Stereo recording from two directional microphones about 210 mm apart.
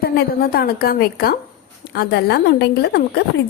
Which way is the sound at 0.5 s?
45° left (ahead or behind).